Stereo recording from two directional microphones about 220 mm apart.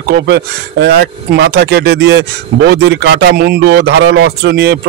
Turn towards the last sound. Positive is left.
turn(degrees=-45)  # may be behind; listen again after turning